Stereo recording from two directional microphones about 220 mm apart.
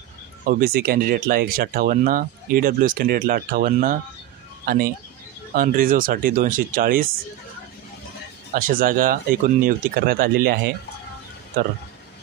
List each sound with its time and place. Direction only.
0.5 s speech: 40° right (ahead or behind)
8.5 s speech: 40° right (ahead or behind)